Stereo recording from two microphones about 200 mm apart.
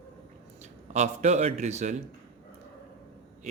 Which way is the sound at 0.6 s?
35° right (ahead or behind).